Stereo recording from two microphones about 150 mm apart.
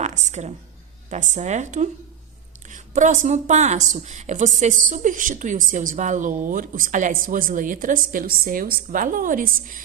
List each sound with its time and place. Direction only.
0.0 s a woman's voice: 50° right (ahead or behind)